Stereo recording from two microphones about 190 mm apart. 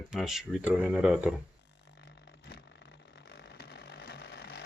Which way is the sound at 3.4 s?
60° left (ahead or behind).